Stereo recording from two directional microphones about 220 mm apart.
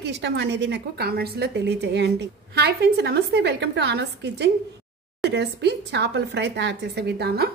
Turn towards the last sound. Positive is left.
turn(degrees=-45)  # may be behind; listen again after turning